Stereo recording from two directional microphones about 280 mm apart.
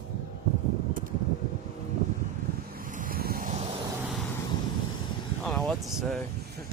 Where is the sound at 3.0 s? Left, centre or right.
Right.